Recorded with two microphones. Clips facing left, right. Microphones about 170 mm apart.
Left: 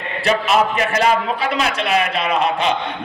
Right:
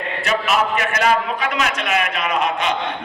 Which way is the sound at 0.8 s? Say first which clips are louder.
Left 2 dB; 35° left (ahead or behind).